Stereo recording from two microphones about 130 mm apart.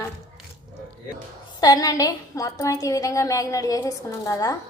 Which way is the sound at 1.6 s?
30° left (ahead or behind).